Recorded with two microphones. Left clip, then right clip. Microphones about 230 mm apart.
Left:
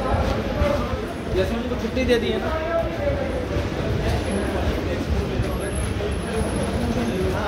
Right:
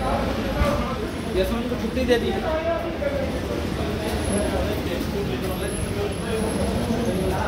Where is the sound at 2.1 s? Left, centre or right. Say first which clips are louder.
Even; left.